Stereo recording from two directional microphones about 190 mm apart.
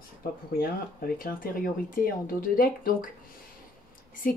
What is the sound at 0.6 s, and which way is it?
Speech, 50° left (ahead or behind).